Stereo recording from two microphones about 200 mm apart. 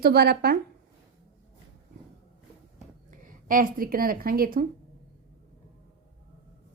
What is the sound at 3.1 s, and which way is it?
Speech, 40° right (ahead or behind).